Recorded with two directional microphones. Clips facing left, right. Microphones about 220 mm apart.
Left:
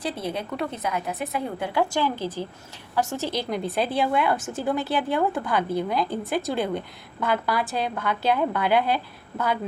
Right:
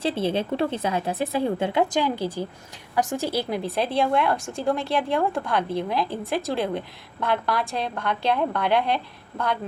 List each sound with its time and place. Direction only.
0.0 s a woman's voice: 25° right (ahead or behind); by 9.0 s 5° left (ahead or behind)